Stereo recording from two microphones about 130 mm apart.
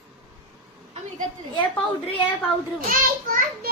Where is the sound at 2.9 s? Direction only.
90° right.